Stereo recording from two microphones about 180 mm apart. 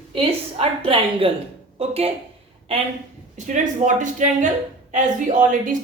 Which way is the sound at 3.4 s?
45° right (ahead or behind).